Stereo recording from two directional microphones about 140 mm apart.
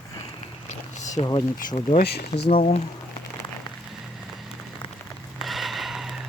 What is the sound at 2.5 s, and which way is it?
Speech, 45° left (ahead or behind).